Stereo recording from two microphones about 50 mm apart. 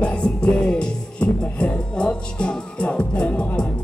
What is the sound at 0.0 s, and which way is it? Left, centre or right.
Music, left.